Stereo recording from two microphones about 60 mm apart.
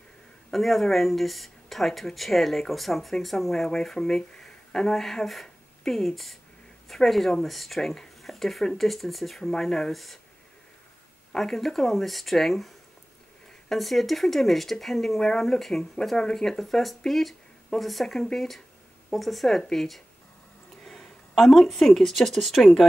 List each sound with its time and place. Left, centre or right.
0.5 s speech: centre
11.3 s speech: centre